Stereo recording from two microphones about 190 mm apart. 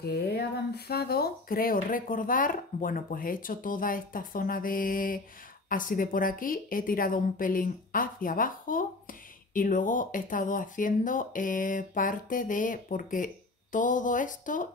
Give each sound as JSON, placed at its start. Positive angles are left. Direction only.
{"t": 0.0, "sound": "speech", "side_deg": 55}